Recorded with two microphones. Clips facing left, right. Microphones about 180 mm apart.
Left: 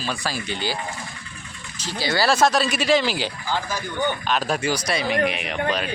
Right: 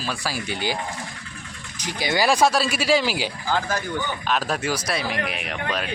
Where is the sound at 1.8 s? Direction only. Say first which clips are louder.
Even; 15° right (ahead or behind).